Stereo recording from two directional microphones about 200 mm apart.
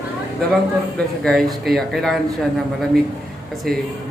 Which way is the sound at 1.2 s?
Centre (ahead or behind).